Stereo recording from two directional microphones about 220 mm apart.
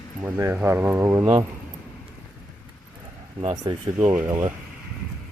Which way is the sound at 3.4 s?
20° right (ahead or behind).